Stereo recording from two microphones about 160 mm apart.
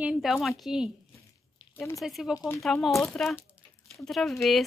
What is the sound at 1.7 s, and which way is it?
Speech, 15° left (ahead or behind).